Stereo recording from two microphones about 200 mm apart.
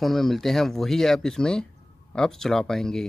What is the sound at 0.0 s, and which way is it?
Speech, centre (ahead or behind).